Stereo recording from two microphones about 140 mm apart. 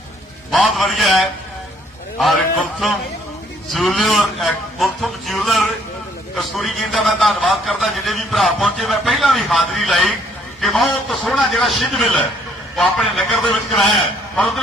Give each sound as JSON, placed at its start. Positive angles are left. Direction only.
{"t": 0.5, "sound": "a man's voice", "side_deg": -5}